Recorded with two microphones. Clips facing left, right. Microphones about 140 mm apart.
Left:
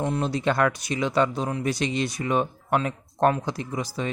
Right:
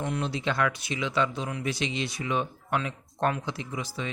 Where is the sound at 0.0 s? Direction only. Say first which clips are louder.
Left 5 dB; 40° left (ahead or behind).